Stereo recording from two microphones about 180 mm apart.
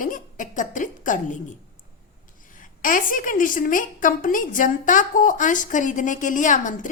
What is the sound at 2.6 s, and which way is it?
A woman's voice, 50° left (ahead or behind).